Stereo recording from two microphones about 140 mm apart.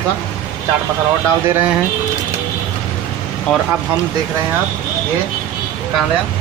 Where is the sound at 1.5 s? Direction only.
15° right (ahead or behind).